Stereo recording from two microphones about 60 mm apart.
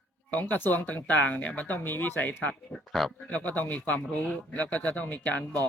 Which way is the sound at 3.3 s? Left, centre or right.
Left.